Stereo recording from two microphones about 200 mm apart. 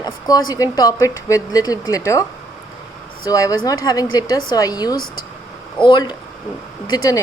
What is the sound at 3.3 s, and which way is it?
A woman's voice, 15° left (ahead or behind).